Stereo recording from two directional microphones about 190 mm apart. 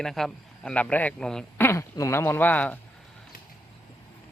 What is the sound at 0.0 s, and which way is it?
Speech, centre (ahead or behind).